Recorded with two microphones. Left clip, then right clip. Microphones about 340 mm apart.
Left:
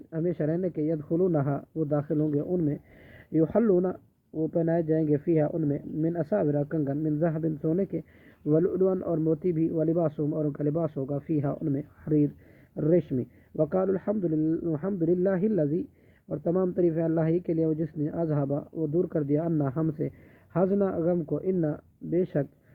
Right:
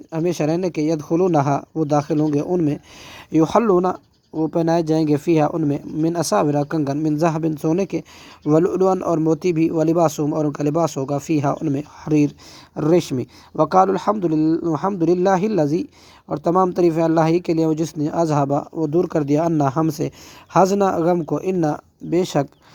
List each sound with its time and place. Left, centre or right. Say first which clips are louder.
0.1 s speech: right 8 dB; centre
3.7 s speech: right 8 dB; right
4.6 s speech: right 8 dB; centre
6.1 s speech: right 9 dB; right
7.0 s a man's voice: right 10 dB; centre
14.2 s speech: right 8 dB; right
14.4 s a man's voice: right 9 dB; centre